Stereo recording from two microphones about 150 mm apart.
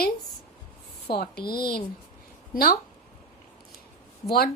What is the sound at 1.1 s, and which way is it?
Speech, 90° left.